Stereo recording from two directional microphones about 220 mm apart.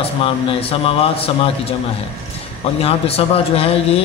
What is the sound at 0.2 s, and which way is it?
A man's voice, 25° left (ahead or behind).